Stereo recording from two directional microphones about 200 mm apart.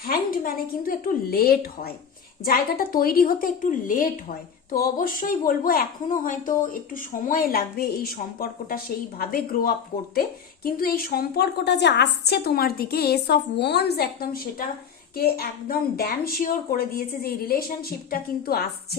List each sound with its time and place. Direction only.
0.0 s a woman's voice: 50° left (ahead or behind)